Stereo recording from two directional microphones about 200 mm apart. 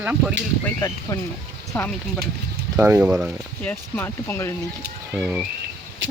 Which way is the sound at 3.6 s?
10° left (ahead or behind).